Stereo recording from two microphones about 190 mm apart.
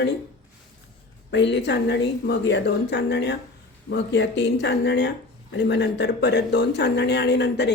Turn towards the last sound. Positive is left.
turn(degrees=65)  # may be behind; listen again after turning